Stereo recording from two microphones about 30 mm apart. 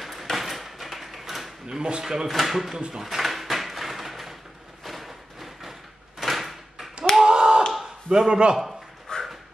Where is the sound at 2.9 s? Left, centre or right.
Centre.